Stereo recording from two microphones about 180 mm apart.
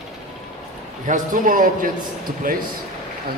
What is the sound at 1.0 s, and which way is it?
Speech, 45° right (ahead or behind).